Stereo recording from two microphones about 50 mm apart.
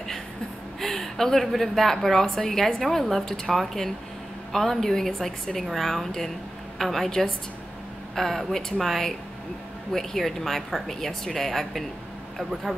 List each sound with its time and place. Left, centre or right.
0.7 s a woman's voice: centre